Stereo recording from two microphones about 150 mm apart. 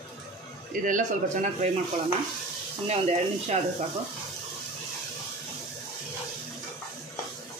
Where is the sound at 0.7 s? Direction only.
60° right (ahead or behind).